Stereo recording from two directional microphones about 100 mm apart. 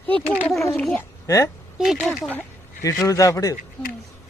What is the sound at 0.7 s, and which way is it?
Speech, 15° left (ahead or behind).